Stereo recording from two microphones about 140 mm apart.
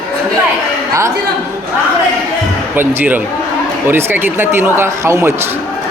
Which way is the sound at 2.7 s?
15° right (ahead or behind).